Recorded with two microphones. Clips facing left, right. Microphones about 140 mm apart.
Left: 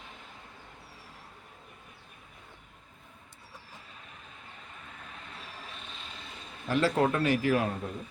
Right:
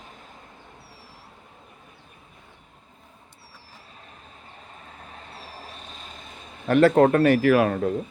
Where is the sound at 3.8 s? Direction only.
35° right (ahead or behind); by 7.9 s 75° right (ahead or behind).